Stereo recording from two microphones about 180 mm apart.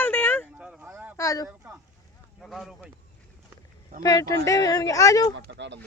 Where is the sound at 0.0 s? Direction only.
10° left (ahead or behind).